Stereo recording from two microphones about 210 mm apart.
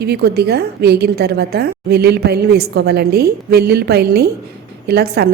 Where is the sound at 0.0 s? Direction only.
50° right (ahead or behind).